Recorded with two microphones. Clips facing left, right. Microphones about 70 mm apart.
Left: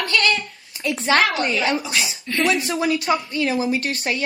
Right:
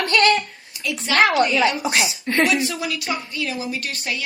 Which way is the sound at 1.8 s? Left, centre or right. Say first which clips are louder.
Right 4 dB; right.